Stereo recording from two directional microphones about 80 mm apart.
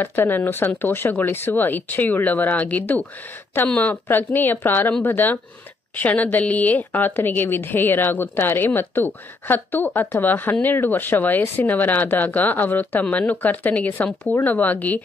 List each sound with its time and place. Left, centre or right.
0.0 s speech: left